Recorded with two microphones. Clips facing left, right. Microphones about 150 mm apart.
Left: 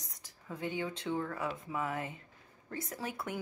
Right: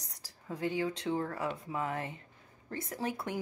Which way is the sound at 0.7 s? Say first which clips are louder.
Right 3 dB; 30° right (ahead or behind).